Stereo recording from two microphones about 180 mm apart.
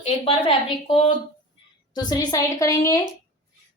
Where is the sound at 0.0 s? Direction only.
30° left (ahead or behind).